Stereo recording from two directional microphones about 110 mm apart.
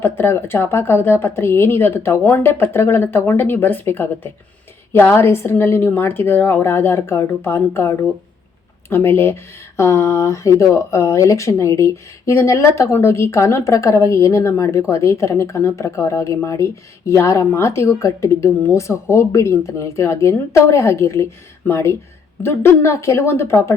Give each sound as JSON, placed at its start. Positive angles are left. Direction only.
{"t": 0.0, "sound": "speech", "side_deg": 20}